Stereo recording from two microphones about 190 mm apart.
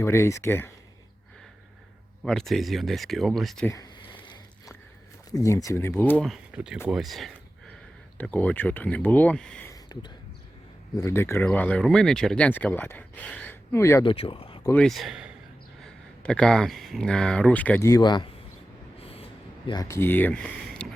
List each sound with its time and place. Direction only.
0.0 s speech: 15° left (ahead or behind)
2.2 s speech: centre (ahead or behind)
3.7 s a sound: 20° left (ahead or behind)
5.3 s speech: 15° left (ahead or behind)
10.9 s speech: 15° left (ahead or behind)
14.0 s speech: 25° left (ahead or behind)
14.6 s speech: 10° left (ahead or behind)
14.8 s speech: centre (ahead or behind); by 18.3 s 20° left (ahead or behind)
18.9 s a sound: 30° left (ahead or behind); by 20.8 s 5° left (ahead or behind)